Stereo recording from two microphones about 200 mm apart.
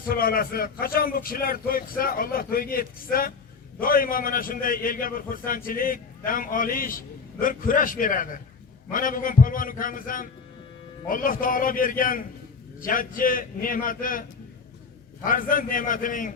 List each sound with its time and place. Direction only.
0.1 s a man's voice: 50° left (ahead or behind)